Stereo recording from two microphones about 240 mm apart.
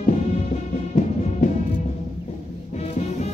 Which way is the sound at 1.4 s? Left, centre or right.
Left.